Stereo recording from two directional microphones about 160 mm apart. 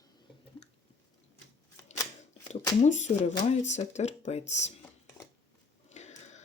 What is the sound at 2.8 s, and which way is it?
Speech, 50° left (ahead or behind).